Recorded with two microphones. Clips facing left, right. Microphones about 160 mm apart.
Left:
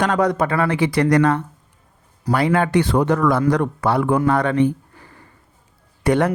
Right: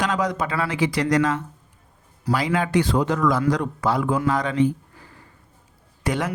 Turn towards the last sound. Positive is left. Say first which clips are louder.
# left 8 dB
turn(degrees=60)  # may be behind; listen again after turning